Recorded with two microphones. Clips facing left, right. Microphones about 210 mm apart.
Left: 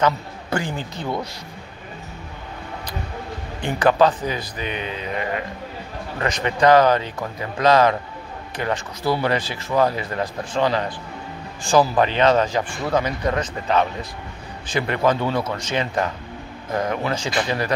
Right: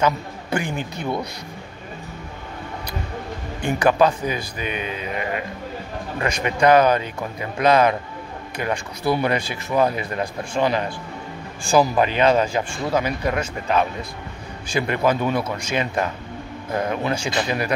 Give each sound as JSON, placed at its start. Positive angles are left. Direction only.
{"t": 0.0, "sound": "speech", "side_deg": -15}
{"t": 3.6, "sound": "speech", "side_deg": -10}
{"t": 4.8, "sound": "mantra", "side_deg": 25}
{"t": 6.1, "sound": "speech", "side_deg": -15}